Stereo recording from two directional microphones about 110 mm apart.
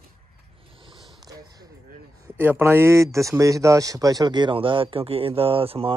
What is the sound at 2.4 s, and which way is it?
Speech, 15° right (ahead or behind).